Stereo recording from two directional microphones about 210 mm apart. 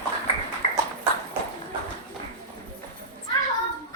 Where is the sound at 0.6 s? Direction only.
35° left (ahead or behind).